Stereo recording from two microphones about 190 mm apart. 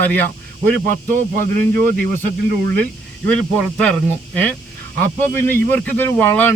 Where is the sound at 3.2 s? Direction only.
5° left (ahead or behind).